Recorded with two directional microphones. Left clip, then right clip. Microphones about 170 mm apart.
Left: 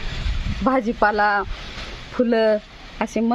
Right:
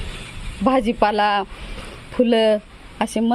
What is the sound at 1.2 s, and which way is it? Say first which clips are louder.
Speech: even; 45° right (ahead or behind).